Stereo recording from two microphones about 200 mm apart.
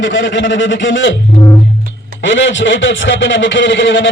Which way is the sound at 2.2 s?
65° left (ahead or behind).